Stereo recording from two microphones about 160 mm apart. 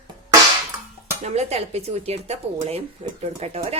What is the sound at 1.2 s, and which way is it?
A woman's voice, 40° right (ahead or behind).